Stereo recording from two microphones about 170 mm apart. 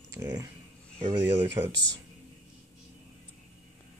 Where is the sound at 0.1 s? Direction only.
20° right (ahead or behind).